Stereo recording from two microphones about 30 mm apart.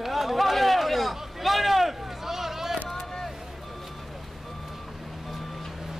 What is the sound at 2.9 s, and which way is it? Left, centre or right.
Vehicle, centre.